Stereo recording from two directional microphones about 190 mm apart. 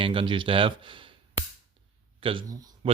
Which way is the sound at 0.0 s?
25° right (ahead or behind).